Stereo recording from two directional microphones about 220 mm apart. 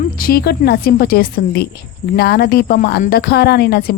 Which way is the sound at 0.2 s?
45° left (ahead or behind).